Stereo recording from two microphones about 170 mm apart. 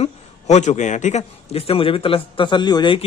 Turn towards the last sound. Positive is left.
turn(degrees=30)  # may be behind; listen again after turning